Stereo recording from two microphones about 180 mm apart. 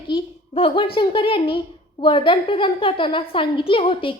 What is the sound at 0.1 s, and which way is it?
A child's voice, 30° left (ahead or behind).